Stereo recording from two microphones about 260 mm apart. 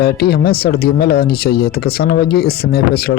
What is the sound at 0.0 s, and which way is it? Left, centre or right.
Speech, left.